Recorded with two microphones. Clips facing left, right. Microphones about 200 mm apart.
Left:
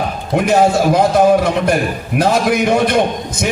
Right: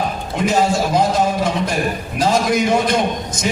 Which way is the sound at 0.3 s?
60° left (ahead or behind).